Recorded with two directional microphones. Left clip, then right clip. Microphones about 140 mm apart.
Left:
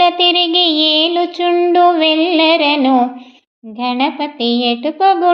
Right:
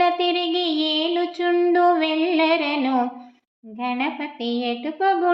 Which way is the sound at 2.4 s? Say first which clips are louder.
Left 8 dB; 30° left (ahead or behind).